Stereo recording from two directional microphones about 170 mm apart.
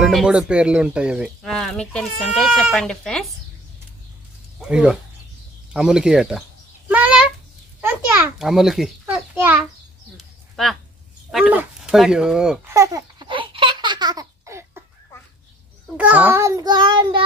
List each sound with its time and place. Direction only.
0.0 s speech: 5° right (ahead or behind)
4.6 s speech: 5° right (ahead or behind)
6.9 s a sound: 5° right (ahead or behind)
11.3 s speech: 5° right (ahead or behind)
12.6 s babbling: 20° right (ahead or behind)
16.0 s child singing: 10° right (ahead or behind); by 17.2 s 30° right (ahead or behind)